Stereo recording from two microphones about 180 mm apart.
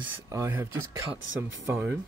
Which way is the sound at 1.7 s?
10° right (ahead or behind).